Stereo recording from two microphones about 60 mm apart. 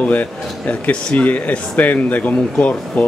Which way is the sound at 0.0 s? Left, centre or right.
Left.